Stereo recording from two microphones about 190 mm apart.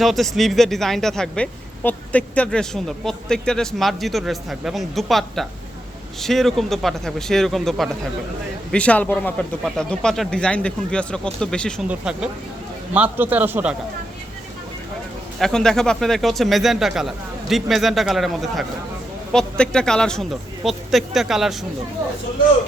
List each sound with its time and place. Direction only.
0.0 s a woman's voice: centre (ahead or behind)
15.4 s a woman's voice: 5° left (ahead or behind)